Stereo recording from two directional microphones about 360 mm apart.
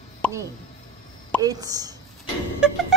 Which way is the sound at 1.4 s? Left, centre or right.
Centre.